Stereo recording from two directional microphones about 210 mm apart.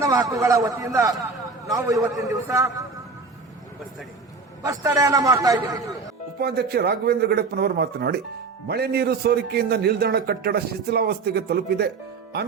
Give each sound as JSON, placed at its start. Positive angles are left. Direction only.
{"t": 0.0, "sound": "a man's voice", "side_deg": -15}
{"t": 4.6, "sound": "a man's voice", "side_deg": -15}
{"t": 6.4, "sound": "a man's voice", "side_deg": -50}